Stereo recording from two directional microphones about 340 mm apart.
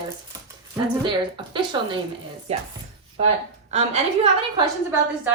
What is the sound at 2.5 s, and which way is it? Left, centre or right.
Speech, centre.